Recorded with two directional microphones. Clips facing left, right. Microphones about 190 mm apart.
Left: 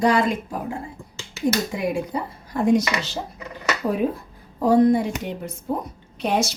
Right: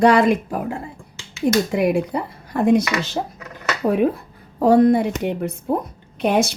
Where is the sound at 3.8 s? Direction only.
60° right (ahead or behind).